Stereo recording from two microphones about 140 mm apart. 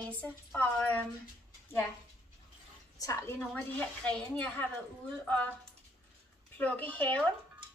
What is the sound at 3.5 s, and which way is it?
A woman's voice, 10° left (ahead or behind).